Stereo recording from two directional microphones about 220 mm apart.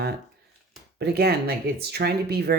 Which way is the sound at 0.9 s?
45° right (ahead or behind).